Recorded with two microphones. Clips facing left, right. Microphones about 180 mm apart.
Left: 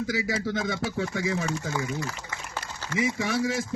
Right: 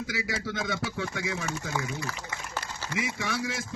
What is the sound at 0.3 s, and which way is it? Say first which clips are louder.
Speech: left 4 dB; 40° left (ahead or behind).